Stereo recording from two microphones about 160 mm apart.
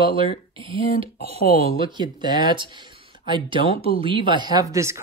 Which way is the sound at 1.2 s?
70° left (ahead or behind).